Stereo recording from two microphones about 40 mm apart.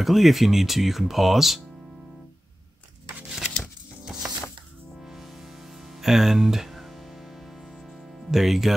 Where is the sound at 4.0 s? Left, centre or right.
Centre.